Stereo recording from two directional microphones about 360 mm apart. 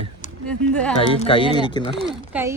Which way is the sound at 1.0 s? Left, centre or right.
Centre.